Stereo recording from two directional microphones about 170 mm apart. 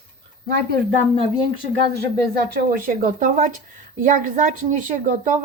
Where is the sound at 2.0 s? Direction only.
60° right (ahead or behind).